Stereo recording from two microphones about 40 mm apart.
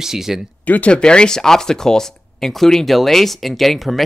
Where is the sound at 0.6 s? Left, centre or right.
Left.